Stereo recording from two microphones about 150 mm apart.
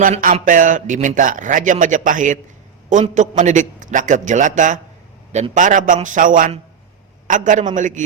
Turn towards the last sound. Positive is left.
turn(degrees=-55)  # may be behind; listen again after turning